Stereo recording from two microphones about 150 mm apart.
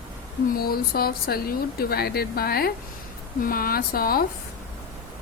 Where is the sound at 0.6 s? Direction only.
90° left.